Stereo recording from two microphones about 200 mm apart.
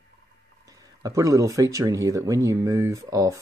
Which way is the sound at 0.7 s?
15° right (ahead or behind).